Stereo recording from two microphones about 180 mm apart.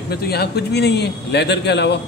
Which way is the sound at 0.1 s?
60° left (ahead or behind).